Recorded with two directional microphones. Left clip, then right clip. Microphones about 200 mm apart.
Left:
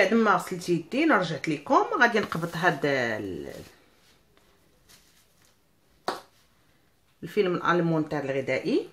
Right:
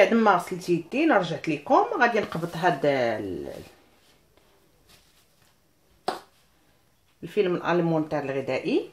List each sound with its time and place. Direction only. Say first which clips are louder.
0.0 s speech: right 3 dB; 5° right (ahead or behind)
0.8 s speech: right 1 dB; 20° left (ahead or behind); by 3.5 s centre (ahead or behind)
7.2 s speech: right 1 dB; 10° left (ahead or behind)